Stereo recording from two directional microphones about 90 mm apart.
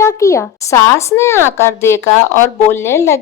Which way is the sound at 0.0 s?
35° left (ahead or behind).